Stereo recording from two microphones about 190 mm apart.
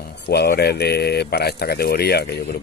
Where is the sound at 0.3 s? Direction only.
55° left (ahead or behind).